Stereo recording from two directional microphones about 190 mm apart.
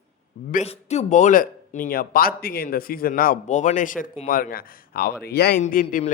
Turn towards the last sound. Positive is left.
turn(degrees=45)  # may be behind; listen again after turning